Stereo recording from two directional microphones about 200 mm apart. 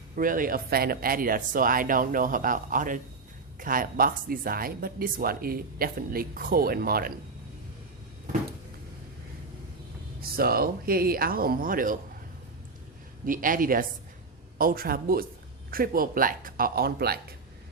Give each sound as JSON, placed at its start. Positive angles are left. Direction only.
{"t": 0.2, "sound": "speech", "side_deg": -45}
{"t": 10.2, "sound": "speech", "side_deg": -50}
{"t": 13.2, "sound": "speech", "side_deg": -45}